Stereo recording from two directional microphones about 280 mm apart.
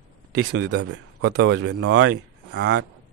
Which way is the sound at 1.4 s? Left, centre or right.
Right.